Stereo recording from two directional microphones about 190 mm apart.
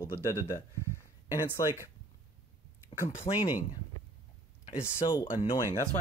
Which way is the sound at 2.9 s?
35° left (ahead or behind).